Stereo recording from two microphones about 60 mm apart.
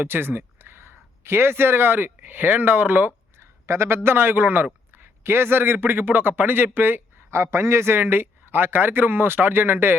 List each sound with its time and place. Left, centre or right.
0.0 s speech: right
3.3 s a man's voice: right
7.3 s speech: right